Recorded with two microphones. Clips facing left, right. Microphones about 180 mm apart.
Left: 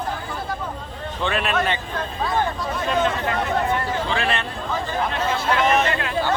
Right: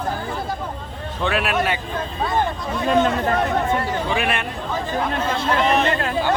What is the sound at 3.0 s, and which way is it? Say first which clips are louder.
Speech: right 3 dB; 40° right (ahead or behind).